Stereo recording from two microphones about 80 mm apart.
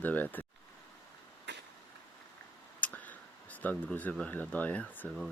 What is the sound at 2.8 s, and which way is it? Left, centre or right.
Speech, centre.